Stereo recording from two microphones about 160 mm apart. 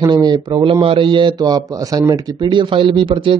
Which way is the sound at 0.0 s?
25° right (ahead or behind).